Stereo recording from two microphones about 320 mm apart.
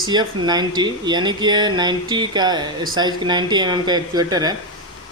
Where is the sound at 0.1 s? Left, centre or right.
Centre.